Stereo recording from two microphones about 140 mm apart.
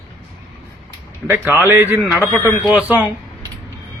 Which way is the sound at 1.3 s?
15° right (ahead or behind).